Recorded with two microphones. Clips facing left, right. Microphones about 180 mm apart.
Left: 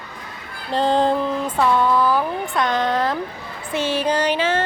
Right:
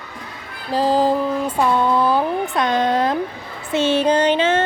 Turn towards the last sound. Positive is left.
turn(degrees=-25)  # may be behind; listen again after turning